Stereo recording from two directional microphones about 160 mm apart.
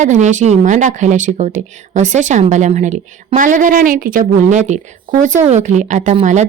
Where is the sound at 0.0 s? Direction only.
50° right (ahead or behind).